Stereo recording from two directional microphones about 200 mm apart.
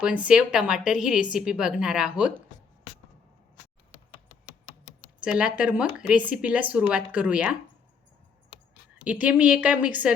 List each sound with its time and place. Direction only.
0.0 s speech: 5° right (ahead or behind)
4.9 s speech: 5° right (ahead or behind)
9.0 s speech: 5° right (ahead or behind)